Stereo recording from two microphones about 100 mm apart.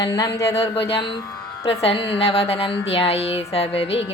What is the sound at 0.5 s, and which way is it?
A woman's voice, 75° left (ahead or behind).